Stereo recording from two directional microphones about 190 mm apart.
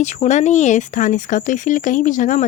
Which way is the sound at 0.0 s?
40° left (ahead or behind).